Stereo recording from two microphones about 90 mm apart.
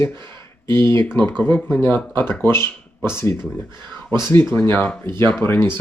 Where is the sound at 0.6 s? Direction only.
30° left (ahead or behind).